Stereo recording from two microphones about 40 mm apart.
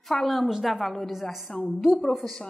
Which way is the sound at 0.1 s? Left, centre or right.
Centre.